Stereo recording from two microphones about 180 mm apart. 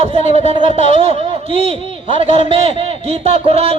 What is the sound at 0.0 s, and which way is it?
Speech, 35° right (ahead or behind).